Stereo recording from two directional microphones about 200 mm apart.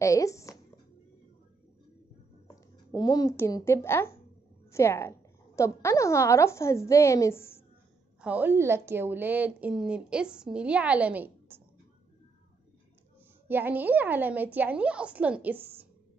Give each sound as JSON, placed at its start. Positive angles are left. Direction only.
{"t": 0.0, "sound": "speech", "side_deg": 15}
{"t": 2.4, "sound": "a woman's voice", "side_deg": 20}
{"t": 8.2, "sound": "a woman's voice", "side_deg": -10}
{"t": 13.5, "sound": "a woman's voice", "side_deg": -10}